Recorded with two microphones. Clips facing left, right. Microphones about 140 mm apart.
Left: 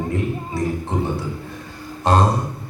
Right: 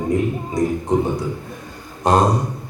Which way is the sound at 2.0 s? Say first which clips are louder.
Right 2 dB; 15° right (ahead or behind).